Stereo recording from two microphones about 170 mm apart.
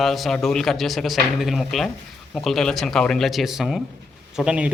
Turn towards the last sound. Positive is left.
turn(degrees=-5)  # may be behind; listen again after turning